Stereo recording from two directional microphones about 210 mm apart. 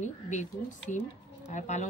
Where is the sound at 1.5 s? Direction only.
35° left (ahead or behind).